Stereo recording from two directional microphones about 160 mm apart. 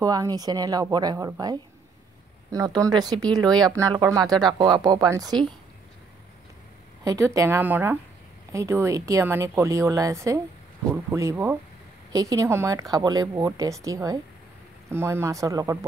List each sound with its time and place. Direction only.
0.0 s speech: 25° right (ahead or behind)
7.1 s a woman's voice: 20° right (ahead or behind)